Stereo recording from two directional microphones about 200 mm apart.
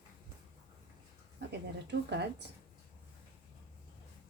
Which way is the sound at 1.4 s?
55° right (ahead or behind).